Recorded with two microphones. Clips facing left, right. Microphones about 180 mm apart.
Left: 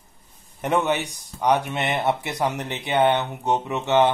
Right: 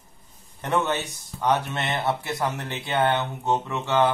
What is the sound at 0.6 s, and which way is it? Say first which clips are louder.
A man's voice: left 3 dB; 15° left (ahead or behind).